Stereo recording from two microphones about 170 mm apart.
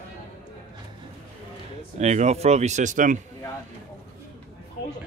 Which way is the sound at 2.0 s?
40° right (ahead or behind).